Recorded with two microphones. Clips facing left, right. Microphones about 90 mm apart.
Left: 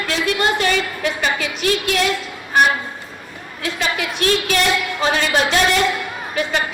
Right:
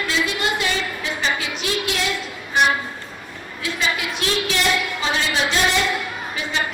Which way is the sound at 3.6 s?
55° left (ahead or behind).